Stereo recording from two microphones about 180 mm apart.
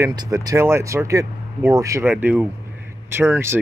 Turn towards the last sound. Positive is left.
turn(degrees=-15)  # may be behind; listen again after turning